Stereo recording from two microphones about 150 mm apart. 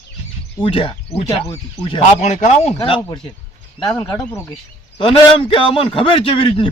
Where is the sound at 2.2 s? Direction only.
50° left (ahead or behind).